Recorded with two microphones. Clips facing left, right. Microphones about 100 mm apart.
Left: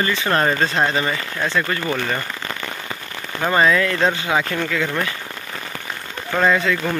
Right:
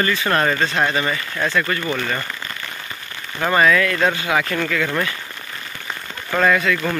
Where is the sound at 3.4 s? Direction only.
20° left (ahead or behind).